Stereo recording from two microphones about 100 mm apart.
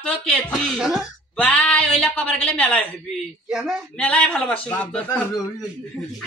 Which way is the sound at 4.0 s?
10° left (ahead or behind).